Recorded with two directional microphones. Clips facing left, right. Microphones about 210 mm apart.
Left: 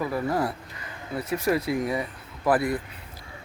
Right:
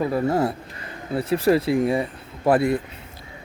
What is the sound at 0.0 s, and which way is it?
Speech, 25° right (ahead or behind).